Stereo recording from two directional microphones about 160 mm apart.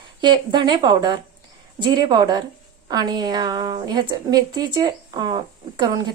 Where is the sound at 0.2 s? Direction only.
30° right (ahead or behind).